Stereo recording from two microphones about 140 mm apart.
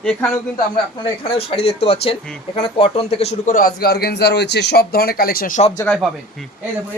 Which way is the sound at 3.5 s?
90° left.